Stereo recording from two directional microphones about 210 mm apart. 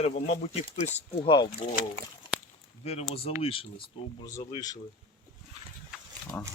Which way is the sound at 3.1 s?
30° left (ahead or behind).